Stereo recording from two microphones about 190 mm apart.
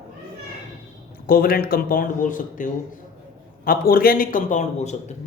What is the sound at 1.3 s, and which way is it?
A man's voice, 50° left (ahead or behind).